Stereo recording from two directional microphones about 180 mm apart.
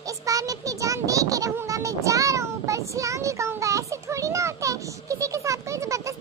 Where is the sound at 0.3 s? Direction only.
20° right (ahead or behind).